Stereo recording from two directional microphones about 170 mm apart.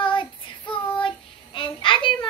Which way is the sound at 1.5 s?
30° left (ahead or behind).